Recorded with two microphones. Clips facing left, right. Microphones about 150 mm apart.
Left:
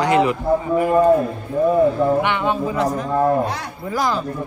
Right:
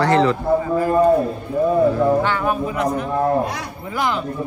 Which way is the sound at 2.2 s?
20° left (ahead or behind).